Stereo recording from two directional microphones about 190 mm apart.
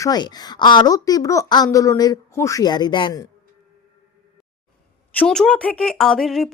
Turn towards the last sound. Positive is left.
turn(degrees=0)  # may be behind; listen again after turning